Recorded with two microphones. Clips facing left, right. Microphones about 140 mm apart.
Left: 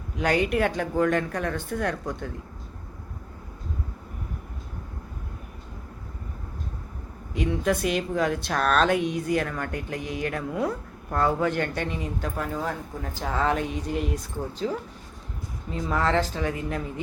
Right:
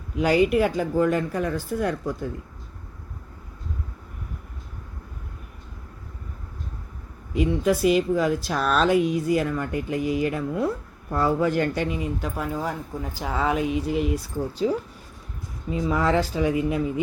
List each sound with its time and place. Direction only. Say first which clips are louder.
0.2 s speech: right 4 dB; 5° right (ahead or behind)
7.3 s speech: right 3 dB; 5° right (ahead or behind)
14.6 s speech: right 6 dB; 15° right (ahead or behind)